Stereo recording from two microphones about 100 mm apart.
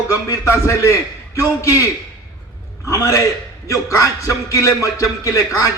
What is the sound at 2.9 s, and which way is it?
A man's voice, 30° left (ahead or behind).